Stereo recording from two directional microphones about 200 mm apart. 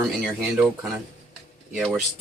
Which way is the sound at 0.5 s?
Centre (ahead or behind).